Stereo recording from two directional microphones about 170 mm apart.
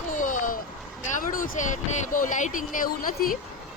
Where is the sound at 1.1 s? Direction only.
55° left (ahead or behind).